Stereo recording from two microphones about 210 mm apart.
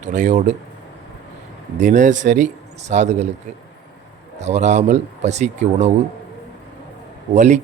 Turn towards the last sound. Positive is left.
turn(degrees=-35)  # may be behind; listen again after turning